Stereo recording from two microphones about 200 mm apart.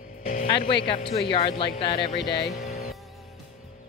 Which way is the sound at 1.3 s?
25° left (ahead or behind).